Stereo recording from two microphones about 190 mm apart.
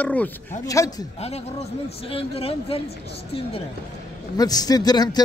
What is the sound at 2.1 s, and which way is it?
Speech, 30° left (ahead or behind).